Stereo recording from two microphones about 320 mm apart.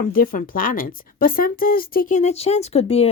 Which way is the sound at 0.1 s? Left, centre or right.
Left.